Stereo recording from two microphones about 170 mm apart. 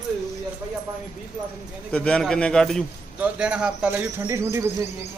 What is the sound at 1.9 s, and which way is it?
A man's voice, 5° left (ahead or behind).